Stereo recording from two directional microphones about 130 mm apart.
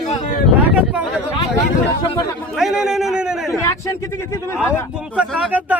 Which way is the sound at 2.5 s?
5° right (ahead or behind).